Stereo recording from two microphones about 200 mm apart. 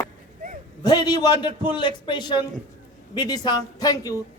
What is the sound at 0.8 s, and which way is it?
A man's voice, 20° left (ahead or behind).